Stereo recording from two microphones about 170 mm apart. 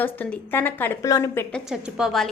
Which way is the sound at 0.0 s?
10° left (ahead or behind).